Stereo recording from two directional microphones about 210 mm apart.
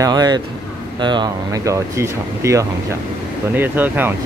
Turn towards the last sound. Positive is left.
turn(degrees=-10)  # may be behind; listen again after turning